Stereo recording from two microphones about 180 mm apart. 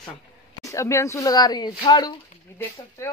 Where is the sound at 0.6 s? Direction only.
15° left (ahead or behind).